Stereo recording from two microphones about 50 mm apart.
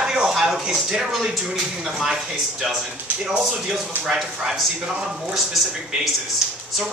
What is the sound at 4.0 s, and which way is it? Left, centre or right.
Speech, centre.